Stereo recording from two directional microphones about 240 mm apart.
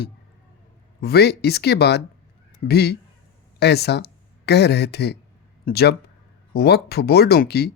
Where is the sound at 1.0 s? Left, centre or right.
Left.